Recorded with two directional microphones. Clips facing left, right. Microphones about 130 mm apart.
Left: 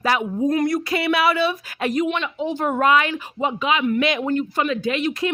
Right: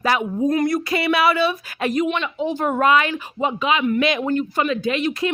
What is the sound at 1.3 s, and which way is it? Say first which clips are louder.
Speech: right 1 dB; 55° right (ahead or behind).